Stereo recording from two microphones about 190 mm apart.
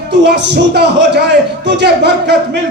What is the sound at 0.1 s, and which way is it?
A man's voice, 65° right (ahead or behind).